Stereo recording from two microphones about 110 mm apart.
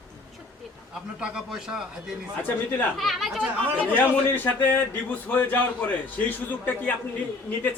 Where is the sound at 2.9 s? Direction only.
Centre (ahead or behind).